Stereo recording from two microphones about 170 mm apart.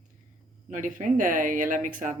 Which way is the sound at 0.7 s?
50° right (ahead or behind).